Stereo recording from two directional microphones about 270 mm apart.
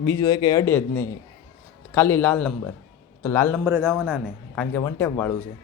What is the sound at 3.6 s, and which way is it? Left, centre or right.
A man's voice, centre.